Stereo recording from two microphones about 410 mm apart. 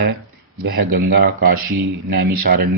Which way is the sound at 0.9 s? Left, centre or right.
Right.